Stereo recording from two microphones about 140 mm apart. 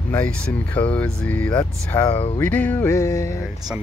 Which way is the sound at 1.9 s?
30° left (ahead or behind).